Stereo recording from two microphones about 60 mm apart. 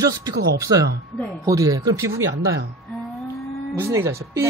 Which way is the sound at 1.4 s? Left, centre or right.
Right.